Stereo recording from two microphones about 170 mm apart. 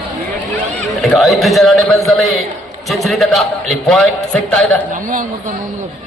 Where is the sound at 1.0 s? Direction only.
Centre (ahead or behind).